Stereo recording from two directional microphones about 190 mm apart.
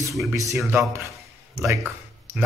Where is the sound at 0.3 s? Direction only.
15° right (ahead or behind).